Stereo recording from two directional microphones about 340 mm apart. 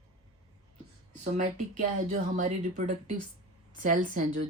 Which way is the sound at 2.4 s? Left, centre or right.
Right.